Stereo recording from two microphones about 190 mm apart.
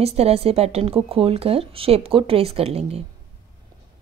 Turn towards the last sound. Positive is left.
turn(degrees=-30)  # may be behind; listen again after turning